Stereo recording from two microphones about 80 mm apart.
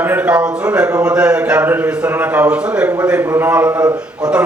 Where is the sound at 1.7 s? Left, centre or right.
Centre.